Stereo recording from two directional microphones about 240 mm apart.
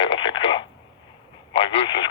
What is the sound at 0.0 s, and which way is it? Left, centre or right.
Radio, left.